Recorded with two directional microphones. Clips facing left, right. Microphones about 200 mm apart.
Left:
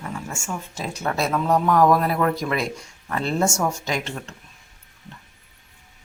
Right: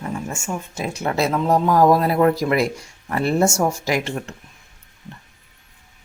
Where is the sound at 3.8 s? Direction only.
10° right (ahead or behind).